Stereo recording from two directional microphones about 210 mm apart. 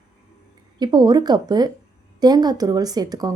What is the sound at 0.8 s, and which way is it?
A woman's voice, 20° right (ahead or behind).